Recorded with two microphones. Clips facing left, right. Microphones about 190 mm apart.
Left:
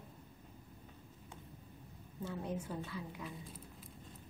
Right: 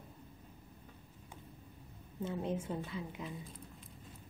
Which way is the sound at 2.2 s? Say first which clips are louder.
Right 4 dB; 20° right (ahead or behind).